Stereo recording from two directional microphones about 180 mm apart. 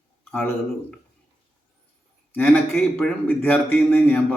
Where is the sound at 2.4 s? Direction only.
10° left (ahead or behind).